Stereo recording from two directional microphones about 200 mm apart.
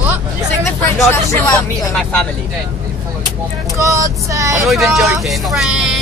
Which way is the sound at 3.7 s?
15° right (ahead or behind).